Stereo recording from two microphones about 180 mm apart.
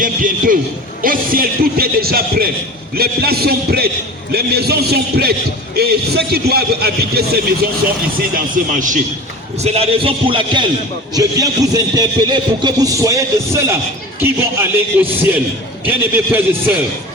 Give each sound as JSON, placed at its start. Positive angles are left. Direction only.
{"t": 0.0, "sound": "a man's voice", "side_deg": -50}
{"t": 8.7, "sound": "a man's voice", "side_deg": -45}
{"t": 9.6, "sound": "a man's voice", "side_deg": -35}